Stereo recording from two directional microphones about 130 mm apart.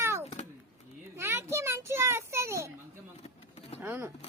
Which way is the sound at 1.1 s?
20° right (ahead or behind).